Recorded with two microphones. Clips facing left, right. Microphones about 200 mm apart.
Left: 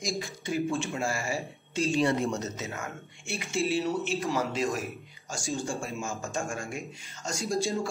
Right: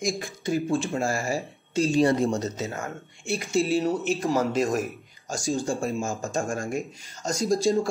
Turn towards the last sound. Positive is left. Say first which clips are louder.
# right 7 dB
turn(degrees=-40)  # may be behind; listen again after turning